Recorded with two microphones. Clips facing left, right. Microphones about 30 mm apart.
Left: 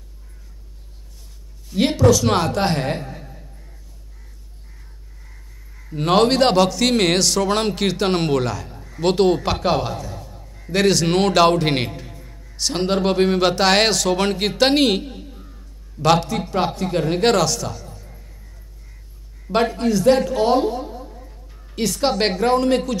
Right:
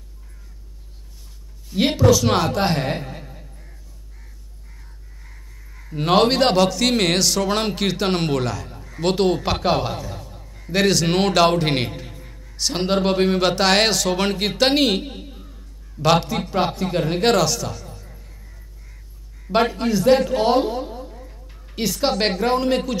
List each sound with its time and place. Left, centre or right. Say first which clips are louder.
2.0 s a man's voice: left 1 dB; centre
5.8 s a man's voice: left 1 dB; centre
10.7 s a man's voice: left 1 dB; centre
12.1 s a sound: even; right
12.5 s a man's voice: even; centre
15.0 s a sound: right 1 dB; right
15.5 s a sound: even; centre
16.4 s a man's voice: even; centre
19.5 s a man's voice: right 1 dB; centre
20.2 s speech: even; centre
20.6 s a woman's voice: left 2 dB; right
21.1 s a sound: right 1 dB; centre
22.4 s speech: left 2 dB; centre